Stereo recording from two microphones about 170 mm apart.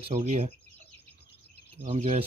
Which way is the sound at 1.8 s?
40° right (ahead or behind).